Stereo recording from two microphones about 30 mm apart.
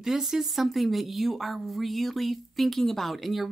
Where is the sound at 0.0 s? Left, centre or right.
Centre.